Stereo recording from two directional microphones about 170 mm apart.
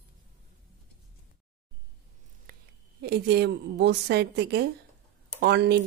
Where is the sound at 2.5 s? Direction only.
70° right (ahead or behind).